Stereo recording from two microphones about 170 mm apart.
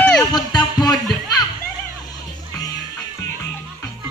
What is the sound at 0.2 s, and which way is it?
Music, 25° left (ahead or behind).